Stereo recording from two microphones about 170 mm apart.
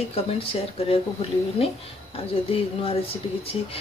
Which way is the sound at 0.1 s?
35° left (ahead or behind).